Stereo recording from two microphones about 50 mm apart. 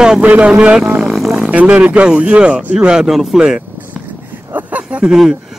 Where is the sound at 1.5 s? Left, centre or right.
Right; by 3.5 s centre.